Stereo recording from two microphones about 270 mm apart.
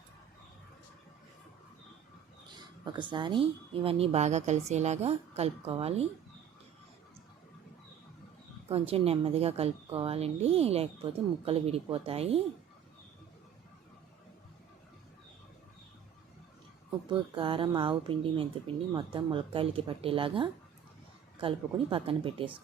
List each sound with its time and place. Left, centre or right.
2.6 s a woman's voice: centre
8.7 s a woman's voice: right
17.1 s a woman's voice: centre